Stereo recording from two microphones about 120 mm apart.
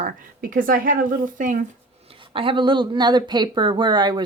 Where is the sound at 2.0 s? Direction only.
45° right (ahead or behind).